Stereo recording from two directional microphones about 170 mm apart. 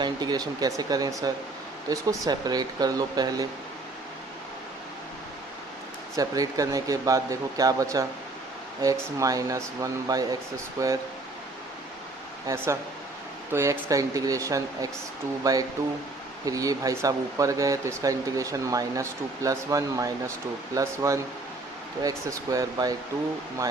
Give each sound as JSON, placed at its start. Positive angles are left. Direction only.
{"t": 0.0, "sound": "speech", "side_deg": -25}
{"t": 6.1, "sound": "speech", "side_deg": -20}
{"t": 13.5, "sound": "speech", "side_deg": -15}